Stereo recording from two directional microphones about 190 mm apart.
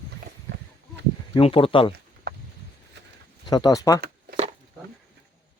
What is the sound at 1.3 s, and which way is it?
Speech, 30° left (ahead or behind).